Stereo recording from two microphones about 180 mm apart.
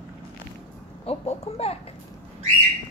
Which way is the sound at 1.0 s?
35° left (ahead or behind).